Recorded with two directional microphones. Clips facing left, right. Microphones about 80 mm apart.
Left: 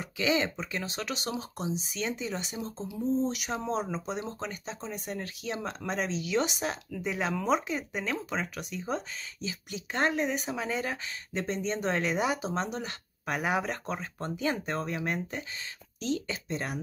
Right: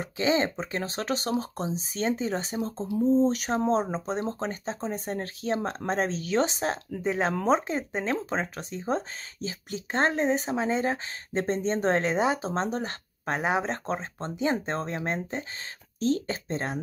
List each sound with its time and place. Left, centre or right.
0.0 s speech: right
16.0 s speech: right